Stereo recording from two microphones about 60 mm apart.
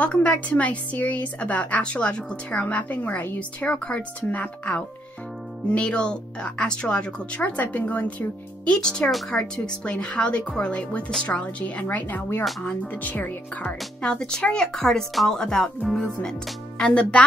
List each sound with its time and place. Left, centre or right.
0.0 s a woman's voice: left
8.7 s a woman's voice: centre; by 13.7 s left
14.0 s speech: centre